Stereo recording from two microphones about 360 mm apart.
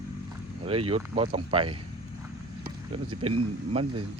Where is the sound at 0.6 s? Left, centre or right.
Centre.